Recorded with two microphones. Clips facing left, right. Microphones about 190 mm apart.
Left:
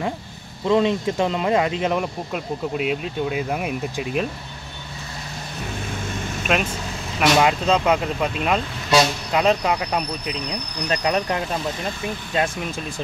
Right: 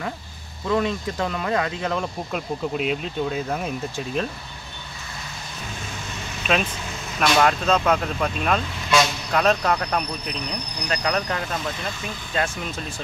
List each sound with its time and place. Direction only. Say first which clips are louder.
0.7 s speech: left 5 dB; 20° left (ahead or behind)
2.3 s speech: even; 5° left (ahead or behind)
6.4 s speech: even; 5° left (ahead or behind)